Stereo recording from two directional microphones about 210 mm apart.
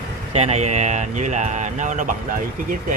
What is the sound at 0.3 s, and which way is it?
Speech, 30° right (ahead or behind).